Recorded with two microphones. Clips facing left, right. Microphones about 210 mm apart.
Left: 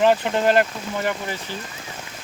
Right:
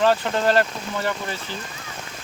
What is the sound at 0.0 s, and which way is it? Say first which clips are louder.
Speech: left 2 dB; 15° left (ahead or behind).